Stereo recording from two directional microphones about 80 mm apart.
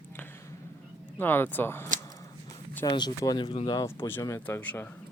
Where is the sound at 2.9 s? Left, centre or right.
Left.